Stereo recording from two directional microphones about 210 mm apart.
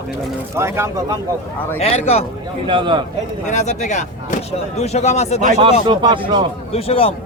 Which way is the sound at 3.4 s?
35° left (ahead or behind).